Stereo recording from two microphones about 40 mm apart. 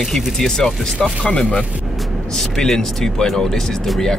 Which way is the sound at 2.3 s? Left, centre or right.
Centre.